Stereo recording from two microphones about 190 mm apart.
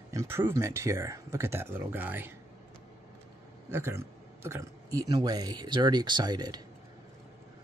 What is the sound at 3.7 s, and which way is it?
Speech, 15° right (ahead or behind).